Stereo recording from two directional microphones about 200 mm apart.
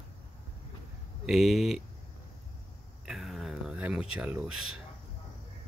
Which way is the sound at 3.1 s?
Centre (ahead or behind).